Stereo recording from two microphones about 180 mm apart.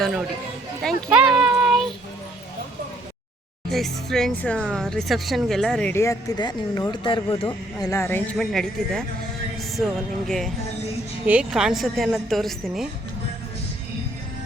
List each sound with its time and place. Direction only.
0.0 s speech: centre (ahead or behind)
0.8 s a sound: centre (ahead or behind)
3.7 s speech: centre (ahead or behind); by 7.9 s 30° left (ahead or behind)
7.9 s speech: 15° left (ahead or behind)